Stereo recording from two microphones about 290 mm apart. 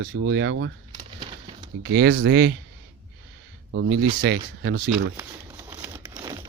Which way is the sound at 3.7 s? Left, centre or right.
Right.